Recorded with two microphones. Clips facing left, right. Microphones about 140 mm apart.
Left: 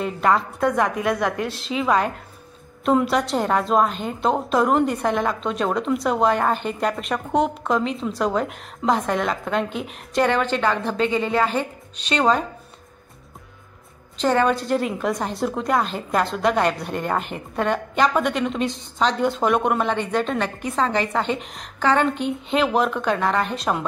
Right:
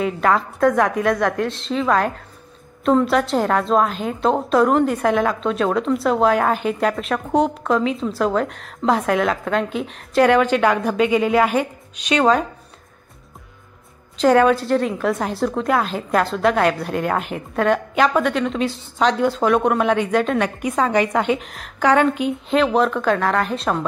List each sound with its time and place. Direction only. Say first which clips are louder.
0.0 s a woman's voice: right 2 dB; centre (ahead or behind)
14.2 s a woman's voice: right 5 dB; 5° right (ahead or behind)